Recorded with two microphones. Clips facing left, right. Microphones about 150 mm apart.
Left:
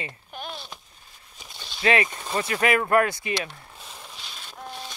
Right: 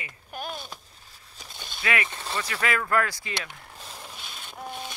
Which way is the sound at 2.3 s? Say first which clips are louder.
Left 6 dB; 25° left (ahead or behind).